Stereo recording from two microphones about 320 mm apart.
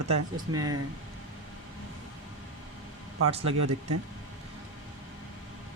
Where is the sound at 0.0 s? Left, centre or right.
Right.